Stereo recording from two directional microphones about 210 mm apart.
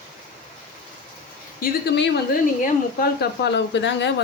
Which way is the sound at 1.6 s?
55° left (ahead or behind).